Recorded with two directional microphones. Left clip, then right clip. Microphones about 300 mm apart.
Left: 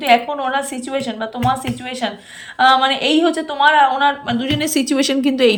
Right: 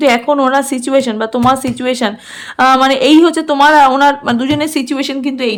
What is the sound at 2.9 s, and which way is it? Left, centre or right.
A woman's voice, centre.